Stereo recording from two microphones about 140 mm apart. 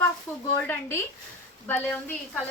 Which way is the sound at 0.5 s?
15° left (ahead or behind).